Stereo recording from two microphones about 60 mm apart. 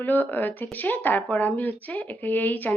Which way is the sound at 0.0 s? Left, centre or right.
Left.